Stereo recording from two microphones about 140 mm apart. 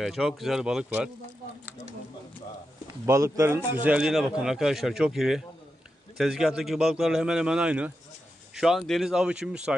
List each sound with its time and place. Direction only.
0.0 s speech: centre (ahead or behind)
3.1 s speech: 20° right (ahead or behind)